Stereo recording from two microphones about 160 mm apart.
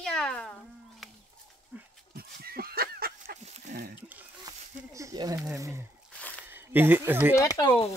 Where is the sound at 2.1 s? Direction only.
70° right (ahead or behind).